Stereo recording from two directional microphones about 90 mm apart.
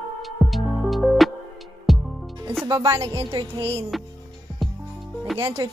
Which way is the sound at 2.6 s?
35° right (ahead or behind).